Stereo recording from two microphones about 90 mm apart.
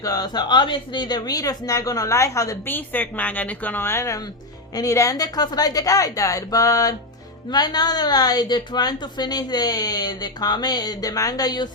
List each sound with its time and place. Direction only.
0.0 s a woman's voice: 45° left (ahead or behind)
2.6 s a woman's voice: 20° left (ahead or behind); by 11.7 s 50° left (ahead or behind)